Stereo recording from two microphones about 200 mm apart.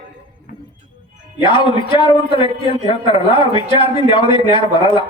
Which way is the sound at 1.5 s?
25° left (ahead or behind).